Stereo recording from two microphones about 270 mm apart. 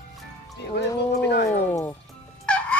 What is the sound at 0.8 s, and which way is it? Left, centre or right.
Speech, left.